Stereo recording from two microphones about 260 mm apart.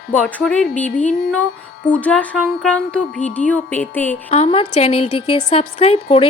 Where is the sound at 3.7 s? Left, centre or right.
Centre.